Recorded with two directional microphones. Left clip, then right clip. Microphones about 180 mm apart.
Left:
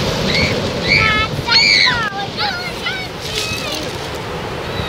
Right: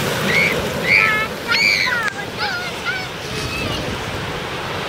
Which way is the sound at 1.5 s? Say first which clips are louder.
Left 5 dB; 40° left (ahead or behind).